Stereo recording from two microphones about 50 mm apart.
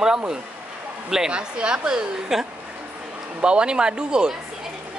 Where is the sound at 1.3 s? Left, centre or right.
Centre.